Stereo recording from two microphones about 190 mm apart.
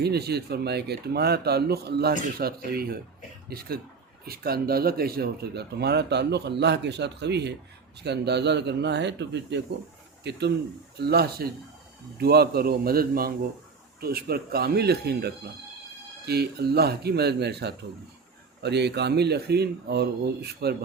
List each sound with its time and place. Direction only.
0.0 s a man's voice: 60° right (ahead or behind)